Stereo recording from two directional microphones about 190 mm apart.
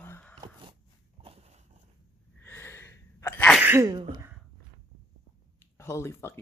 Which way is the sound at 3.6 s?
10° right (ahead or behind).